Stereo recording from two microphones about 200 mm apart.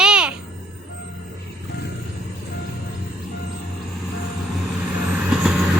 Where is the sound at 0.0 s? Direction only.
5° right (ahead or behind).